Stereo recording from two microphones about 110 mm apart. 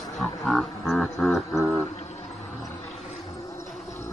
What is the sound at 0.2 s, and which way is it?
Didgeridoo, 5° left (ahead or behind).